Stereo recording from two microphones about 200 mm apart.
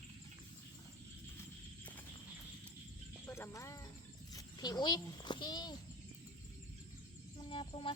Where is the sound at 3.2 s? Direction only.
10° left (ahead or behind).